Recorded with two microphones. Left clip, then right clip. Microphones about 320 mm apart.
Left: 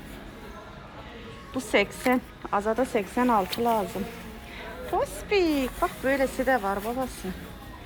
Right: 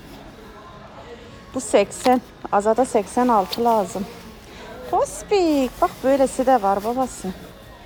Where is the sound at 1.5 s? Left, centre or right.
Centre.